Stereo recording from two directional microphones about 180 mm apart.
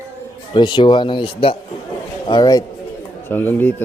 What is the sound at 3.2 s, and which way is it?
Speech, 10° left (ahead or behind).